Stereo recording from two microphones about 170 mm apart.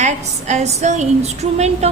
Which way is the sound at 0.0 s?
45° right (ahead or behind).